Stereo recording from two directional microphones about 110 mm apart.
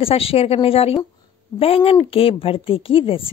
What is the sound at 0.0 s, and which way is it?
A woman's voice, 60° left (ahead or behind).